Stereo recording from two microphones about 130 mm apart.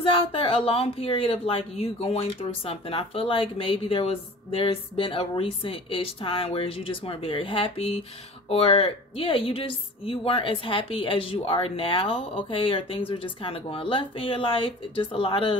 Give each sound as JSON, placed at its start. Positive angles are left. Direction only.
{"t": 0.0, "sound": "a woman's voice", "side_deg": 40}